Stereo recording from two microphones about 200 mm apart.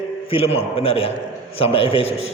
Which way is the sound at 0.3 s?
30° left (ahead or behind).